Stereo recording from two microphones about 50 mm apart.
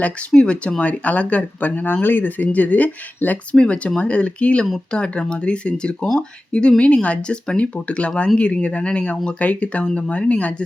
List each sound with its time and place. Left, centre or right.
0.3 s speech: centre
3.5 s speech: left